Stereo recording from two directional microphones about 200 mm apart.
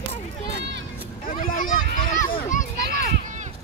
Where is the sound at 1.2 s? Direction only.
45° left (ahead or behind).